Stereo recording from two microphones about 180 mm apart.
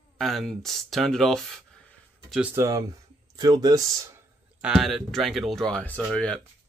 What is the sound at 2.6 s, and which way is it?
Speech, 20° right (ahead or behind).